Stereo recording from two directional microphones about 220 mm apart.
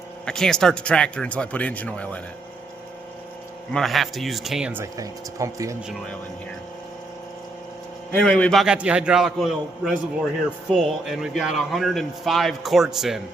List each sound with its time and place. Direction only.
0.3 s speech: 5° left (ahead or behind)
3.7 s speech: centre (ahead or behind); by 5.7 s 15° right (ahead or behind)
8.1 s speech: 5° left (ahead or behind)